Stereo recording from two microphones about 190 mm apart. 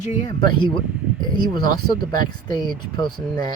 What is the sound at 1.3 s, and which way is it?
Speech, 20° left (ahead or behind).